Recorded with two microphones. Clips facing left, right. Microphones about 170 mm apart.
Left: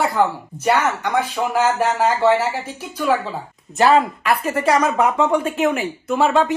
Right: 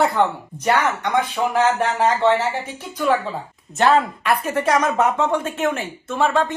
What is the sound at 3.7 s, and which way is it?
Speech, centre (ahead or behind).